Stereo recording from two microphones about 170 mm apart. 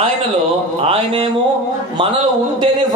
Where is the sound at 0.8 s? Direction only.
35° right (ahead or behind).